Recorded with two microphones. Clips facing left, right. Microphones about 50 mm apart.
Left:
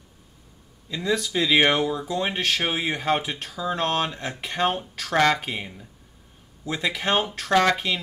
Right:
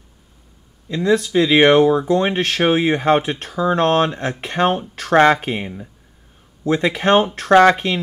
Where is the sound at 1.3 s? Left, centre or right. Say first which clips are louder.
Right 6 dB; centre.